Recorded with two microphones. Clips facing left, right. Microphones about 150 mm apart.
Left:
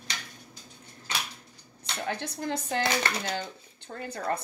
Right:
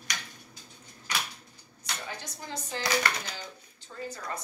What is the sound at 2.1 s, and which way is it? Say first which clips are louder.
Speech: left 8 dB; 60° left (ahead or behind).